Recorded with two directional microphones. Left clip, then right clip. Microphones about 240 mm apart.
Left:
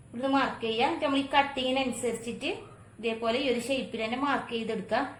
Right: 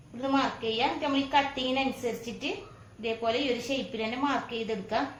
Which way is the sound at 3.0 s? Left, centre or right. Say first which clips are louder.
Even; left.